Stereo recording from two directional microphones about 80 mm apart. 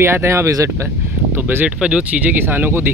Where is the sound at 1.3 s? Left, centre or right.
Right.